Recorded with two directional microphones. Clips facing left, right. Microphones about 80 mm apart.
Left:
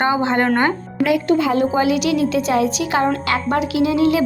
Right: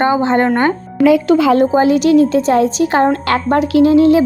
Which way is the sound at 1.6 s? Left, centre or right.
Right.